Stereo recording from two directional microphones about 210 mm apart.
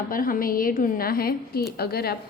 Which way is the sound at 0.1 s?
40° left (ahead or behind).